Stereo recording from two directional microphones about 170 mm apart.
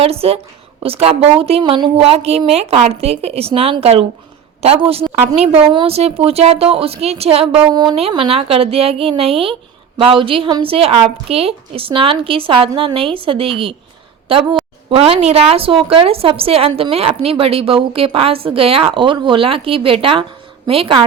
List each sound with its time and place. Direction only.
0.0 s a woman's voice: 35° right (ahead or behind)
7.7 s a woman's voice: 25° right (ahead or behind)
14.8 s a woman's voice: 35° right (ahead or behind)